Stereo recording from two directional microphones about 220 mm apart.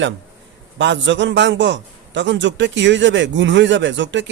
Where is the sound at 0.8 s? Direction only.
55° right (ahead or behind).